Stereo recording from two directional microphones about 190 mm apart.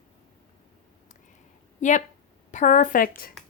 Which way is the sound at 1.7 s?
40° left (ahead or behind).